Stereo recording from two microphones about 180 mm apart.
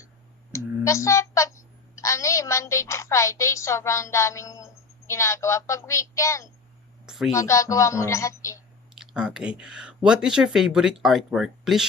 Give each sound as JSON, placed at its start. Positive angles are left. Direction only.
{"t": 0.5, "sound": "a woman's voice", "side_deg": 15}
{"t": 7.0, "sound": "a sound", "side_deg": -5}
{"t": 7.3, "sound": "a woman's voice", "side_deg": 15}
{"t": 9.0, "sound": "speech", "side_deg": -5}